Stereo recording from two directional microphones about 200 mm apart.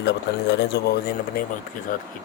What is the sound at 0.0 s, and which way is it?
Speech, 60° left (ahead or behind).